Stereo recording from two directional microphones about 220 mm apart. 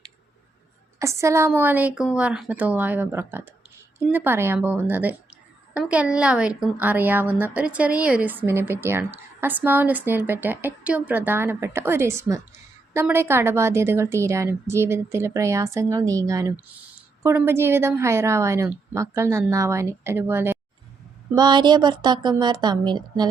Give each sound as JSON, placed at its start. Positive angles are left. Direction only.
{"t": 0.9, "sound": "a woman's voice", "side_deg": -15}